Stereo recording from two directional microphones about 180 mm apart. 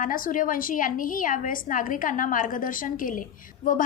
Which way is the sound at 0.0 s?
50° left (ahead or behind).